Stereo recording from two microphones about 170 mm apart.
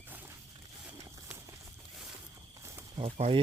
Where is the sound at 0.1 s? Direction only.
10° right (ahead or behind).